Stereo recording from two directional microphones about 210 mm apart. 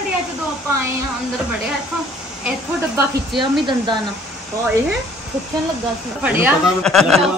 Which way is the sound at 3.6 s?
20° right (ahead or behind).